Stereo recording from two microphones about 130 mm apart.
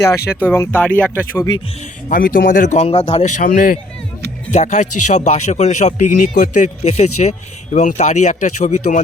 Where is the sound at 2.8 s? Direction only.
50° left (ahead or behind).